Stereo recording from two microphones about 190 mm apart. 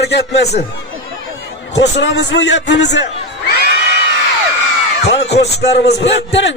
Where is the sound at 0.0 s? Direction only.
60° left (ahead or behind).